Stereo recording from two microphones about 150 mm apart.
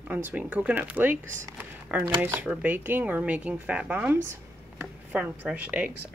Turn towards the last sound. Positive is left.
turn(degrees=-10)  # may be behind; listen again after turning